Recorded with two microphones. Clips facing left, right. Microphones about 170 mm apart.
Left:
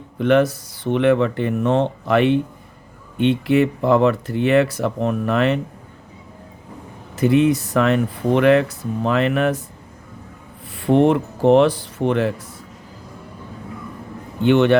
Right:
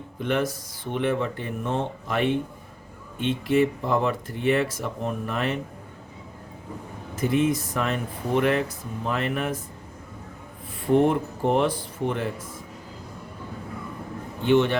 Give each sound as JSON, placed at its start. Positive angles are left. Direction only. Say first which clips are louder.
{"t": 0.2, "sound": "speech", "louder": "left 9 dB", "side_deg": 70}
{"t": 7.2, "sound": "speech", "louder": "left 7 dB", "side_deg": 70}
{"t": 10.8, "sound": "speech", "louder": "left 5 dB", "side_deg": 75}
{"t": 14.4, "sound": "speech", "louder": "left 6 dB", "side_deg": 70}